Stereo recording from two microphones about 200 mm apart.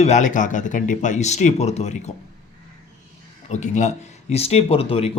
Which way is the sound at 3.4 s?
35° left (ahead or behind).